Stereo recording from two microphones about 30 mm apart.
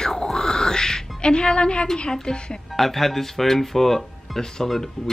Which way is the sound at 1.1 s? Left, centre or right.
Left.